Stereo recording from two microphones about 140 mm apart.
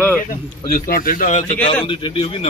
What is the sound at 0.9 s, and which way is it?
Speech, 80° left.